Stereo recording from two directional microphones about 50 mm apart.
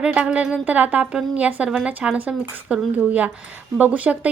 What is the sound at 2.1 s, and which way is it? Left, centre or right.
Speech, right.